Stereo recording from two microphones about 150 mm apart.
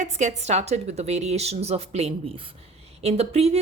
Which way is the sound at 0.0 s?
55° right (ahead or behind).